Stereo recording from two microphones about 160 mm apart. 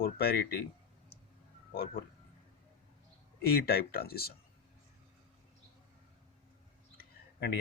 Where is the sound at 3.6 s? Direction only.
75° left (ahead or behind).